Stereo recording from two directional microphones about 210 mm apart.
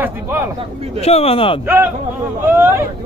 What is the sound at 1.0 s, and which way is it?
Speech, 30° left (ahead or behind).